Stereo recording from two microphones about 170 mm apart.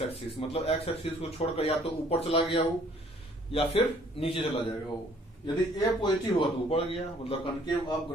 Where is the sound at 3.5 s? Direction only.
35° left (ahead or behind).